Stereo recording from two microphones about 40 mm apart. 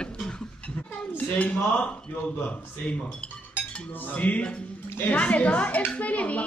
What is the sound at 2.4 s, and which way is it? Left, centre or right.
Speech, left.